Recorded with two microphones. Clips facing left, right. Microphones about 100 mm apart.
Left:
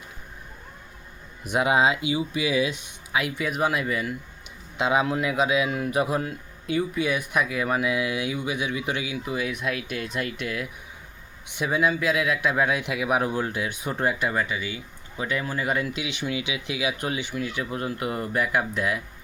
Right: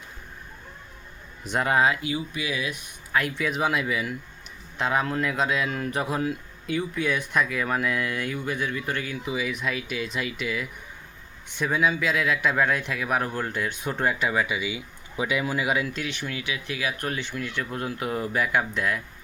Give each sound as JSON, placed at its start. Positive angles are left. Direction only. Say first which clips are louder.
{"t": 1.5, "sound": "speech", "louder": "left 1 dB", "side_deg": 10}
{"t": 3.1, "sound": "speech", "louder": "right 1 dB", "side_deg": 5}
{"t": 4.8, "sound": "a man's voice", "louder": "left 2 dB", "side_deg": 15}
{"t": 9.2, "sound": "speech", "louder": "right 1 dB", "side_deg": 0}
{"t": 14.4, "sound": "speech", "louder": "right 2 dB", "side_deg": -15}
{"t": 15.9, "sound": "a man's voice", "louder": "left 2 dB", "side_deg": 15}